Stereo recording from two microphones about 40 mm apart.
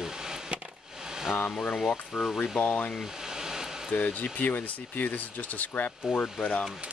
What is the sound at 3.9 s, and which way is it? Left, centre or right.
Speech, left.